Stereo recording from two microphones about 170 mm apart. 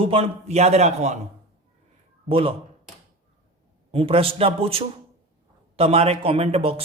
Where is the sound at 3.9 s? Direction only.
35° right (ahead or behind).